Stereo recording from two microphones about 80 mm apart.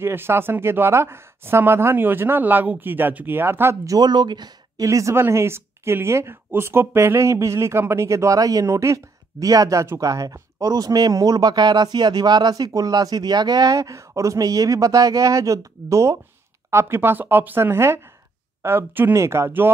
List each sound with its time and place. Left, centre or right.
0.0 s speech: right
3.8 s speech: right
4.8 s speech: right
13.7 s speech: right